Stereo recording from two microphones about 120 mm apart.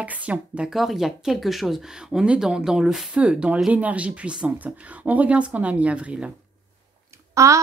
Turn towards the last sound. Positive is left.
turn(degrees=-25)  # may be behind; listen again after turning